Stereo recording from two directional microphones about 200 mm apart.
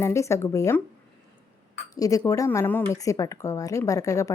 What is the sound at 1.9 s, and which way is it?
Speech, 15° left (ahead or behind).